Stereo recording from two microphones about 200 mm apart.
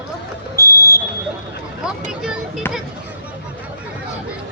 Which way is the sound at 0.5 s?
15° left (ahead or behind).